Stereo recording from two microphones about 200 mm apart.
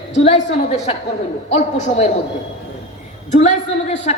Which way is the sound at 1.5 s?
35° left (ahead or behind).